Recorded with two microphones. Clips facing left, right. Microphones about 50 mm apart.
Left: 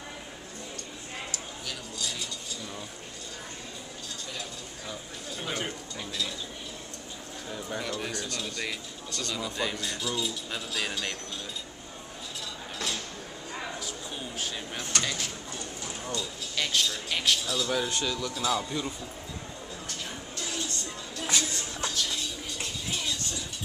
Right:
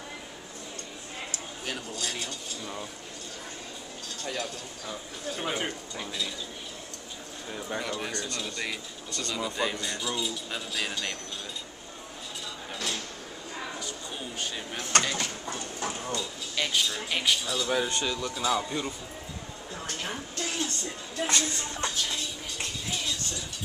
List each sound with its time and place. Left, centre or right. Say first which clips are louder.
1.3 s a sound: right 2 dB; right
5.4 s speech: right 2 dB; centre
7.8 s speech: right 1 dB; centre
14.8 s speech: right 6 dB; right
15.1 s a sound: right 3 dB; right
16.2 s speech: right 1 dB; centre
19.9 s a sound: right 6 dB; right
21.3 s music: even; centre
21.5 s music: right 1 dB; centre